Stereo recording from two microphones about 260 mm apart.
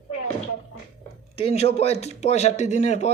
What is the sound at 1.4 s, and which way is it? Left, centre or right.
Speech, left.